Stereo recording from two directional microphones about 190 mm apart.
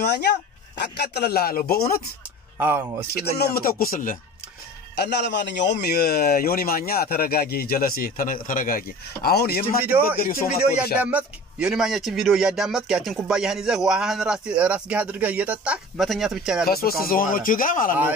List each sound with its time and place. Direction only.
0.0 s speech: 60° left (ahead or behind)
2.6 s speech: 10° right (ahead or behind)
3.2 s a man's voice: 55° left (ahead or behind)
4.9 s a man's voice: 60° left (ahead or behind)
11.0 s speech: 10° right (ahead or behind)
16.6 s a man's voice: 55° left (ahead or behind)